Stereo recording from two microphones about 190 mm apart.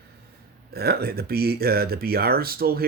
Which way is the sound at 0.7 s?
55° right (ahead or behind).